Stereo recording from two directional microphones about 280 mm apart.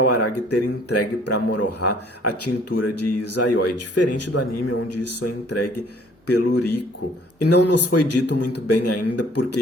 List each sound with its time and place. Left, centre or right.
0.1 s speech: left